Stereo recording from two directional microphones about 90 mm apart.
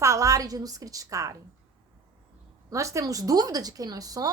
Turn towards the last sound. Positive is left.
turn(degrees=-40)  # may be behind; listen again after turning